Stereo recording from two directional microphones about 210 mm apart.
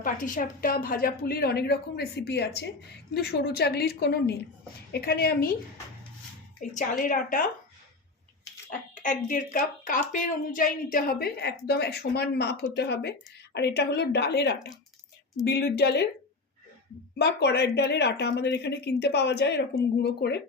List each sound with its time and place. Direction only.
0.0 s speech: 40° left (ahead or behind)
6.6 s speech: 40° left (ahead or behind)
9.0 s speech: 40° left (ahead or behind)
17.2 s speech: 55° left (ahead or behind)